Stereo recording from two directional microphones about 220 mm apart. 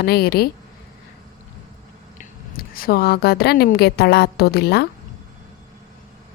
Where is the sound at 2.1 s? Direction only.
40° left (ahead or behind).